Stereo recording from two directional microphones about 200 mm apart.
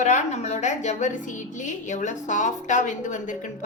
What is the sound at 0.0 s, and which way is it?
A woman's voice, 35° left (ahead or behind).